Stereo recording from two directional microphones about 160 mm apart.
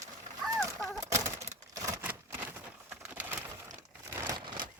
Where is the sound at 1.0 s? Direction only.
20° right (ahead or behind).